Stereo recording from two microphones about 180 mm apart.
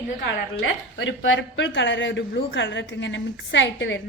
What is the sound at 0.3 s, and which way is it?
A woman's voice, 80° left.